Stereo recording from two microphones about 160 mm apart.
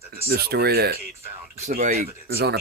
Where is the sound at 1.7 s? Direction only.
50° right (ahead or behind).